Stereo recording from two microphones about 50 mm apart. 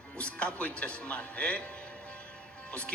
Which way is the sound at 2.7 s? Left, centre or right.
Left.